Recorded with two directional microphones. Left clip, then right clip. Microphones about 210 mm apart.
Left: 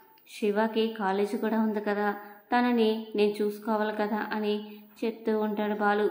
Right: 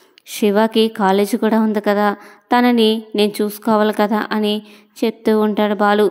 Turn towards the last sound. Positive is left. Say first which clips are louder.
# right 12 dB
turn(degrees=-45)  # may be behind; listen again after turning